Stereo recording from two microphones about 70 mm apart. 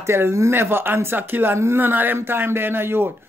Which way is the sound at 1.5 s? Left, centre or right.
Right.